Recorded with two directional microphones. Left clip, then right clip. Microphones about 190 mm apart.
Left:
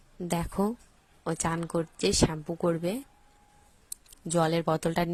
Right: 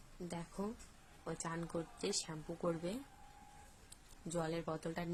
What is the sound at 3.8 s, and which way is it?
Speech, 45° left (ahead or behind).